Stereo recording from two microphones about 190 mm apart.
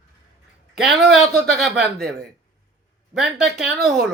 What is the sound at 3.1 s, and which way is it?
Speech, centre (ahead or behind).